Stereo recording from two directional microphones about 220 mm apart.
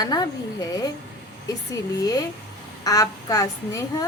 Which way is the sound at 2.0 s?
15° left (ahead or behind).